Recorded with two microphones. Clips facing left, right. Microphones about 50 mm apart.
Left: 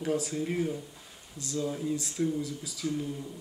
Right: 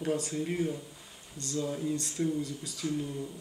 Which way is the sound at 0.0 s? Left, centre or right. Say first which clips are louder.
Left 1 dB; centre.